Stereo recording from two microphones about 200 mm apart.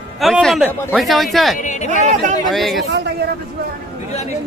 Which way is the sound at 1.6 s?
40° left (ahead or behind).